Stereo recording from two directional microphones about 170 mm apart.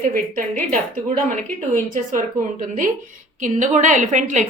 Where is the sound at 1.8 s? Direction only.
50° right (ahead or behind).